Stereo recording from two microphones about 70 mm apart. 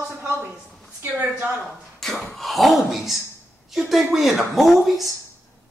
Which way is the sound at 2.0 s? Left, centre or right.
Centre.